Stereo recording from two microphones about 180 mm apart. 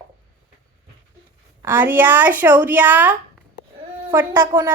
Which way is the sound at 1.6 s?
10° right (ahead or behind).